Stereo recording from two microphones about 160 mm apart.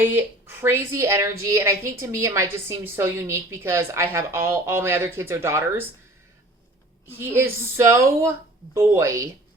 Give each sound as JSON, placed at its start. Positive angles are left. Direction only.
{"t": 0.0, "sound": "a woman's voice", "side_deg": -15}
{"t": 7.1, "sound": "a woman's voice", "side_deg": -15}